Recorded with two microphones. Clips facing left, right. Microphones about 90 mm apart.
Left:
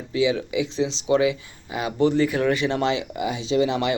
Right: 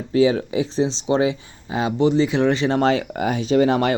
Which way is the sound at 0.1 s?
40° right (ahead or behind).